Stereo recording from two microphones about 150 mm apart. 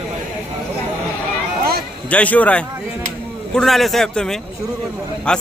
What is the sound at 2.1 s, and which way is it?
A man's voice, 10° left (ahead or behind).